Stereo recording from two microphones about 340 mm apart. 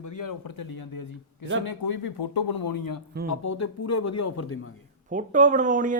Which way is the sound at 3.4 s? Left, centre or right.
Left.